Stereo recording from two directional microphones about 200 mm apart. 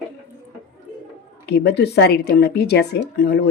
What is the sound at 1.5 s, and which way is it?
A woman's voice, 55° left (ahead or behind).